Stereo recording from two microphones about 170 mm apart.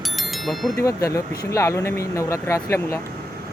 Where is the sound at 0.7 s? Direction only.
20° left (ahead or behind).